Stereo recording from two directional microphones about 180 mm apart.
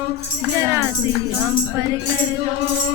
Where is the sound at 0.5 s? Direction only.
15° right (ahead or behind).